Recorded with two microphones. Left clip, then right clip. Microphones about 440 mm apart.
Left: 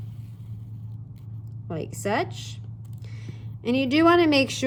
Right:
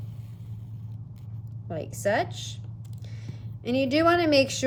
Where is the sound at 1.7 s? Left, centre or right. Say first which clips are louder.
Right 1 dB; centre.